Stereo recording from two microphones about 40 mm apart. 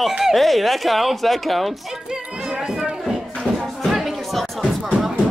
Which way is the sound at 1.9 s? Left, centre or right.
Centre.